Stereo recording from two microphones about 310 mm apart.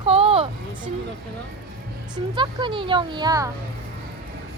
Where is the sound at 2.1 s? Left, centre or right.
Centre.